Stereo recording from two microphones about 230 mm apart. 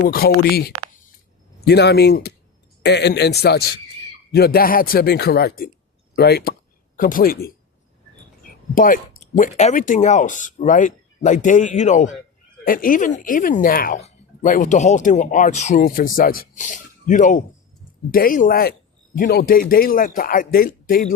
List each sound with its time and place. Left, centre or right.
0.0 s a man's voice: left
8.7 s speech: left